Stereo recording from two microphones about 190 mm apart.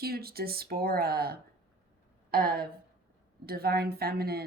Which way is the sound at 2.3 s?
50° right (ahead or behind).